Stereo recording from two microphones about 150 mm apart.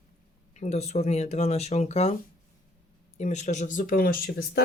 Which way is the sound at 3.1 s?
50° left (ahead or behind).